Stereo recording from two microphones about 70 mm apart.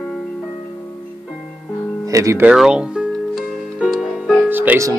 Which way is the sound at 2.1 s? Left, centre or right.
Right.